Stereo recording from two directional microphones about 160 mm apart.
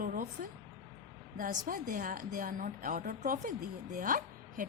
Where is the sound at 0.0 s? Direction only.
60° right (ahead or behind).